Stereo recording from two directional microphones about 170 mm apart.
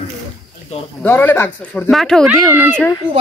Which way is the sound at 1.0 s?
10° left (ahead or behind).